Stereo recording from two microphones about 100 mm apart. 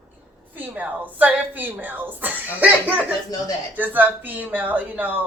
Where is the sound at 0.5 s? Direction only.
15° right (ahead or behind).